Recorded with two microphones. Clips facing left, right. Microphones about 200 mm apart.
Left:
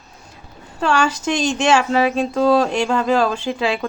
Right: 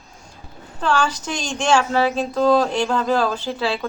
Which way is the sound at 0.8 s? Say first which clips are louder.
Left 3 dB; 10° left (ahead or behind).